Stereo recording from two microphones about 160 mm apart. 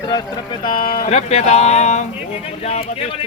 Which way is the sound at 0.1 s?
30° left (ahead or behind).